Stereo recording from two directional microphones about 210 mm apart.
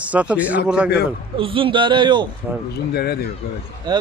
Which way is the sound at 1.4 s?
25° right (ahead or behind).